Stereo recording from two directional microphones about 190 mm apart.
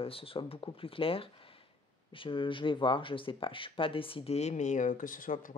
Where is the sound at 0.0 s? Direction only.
30° left (ahead or behind).